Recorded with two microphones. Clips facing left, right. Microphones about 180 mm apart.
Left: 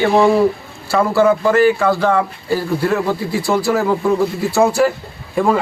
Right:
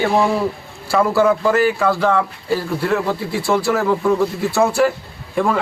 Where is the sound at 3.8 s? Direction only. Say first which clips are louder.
Left 1 dB; 15° left (ahead or behind).